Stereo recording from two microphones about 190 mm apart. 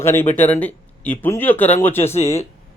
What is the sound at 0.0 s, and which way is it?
Speech, 10° left (ahead or behind).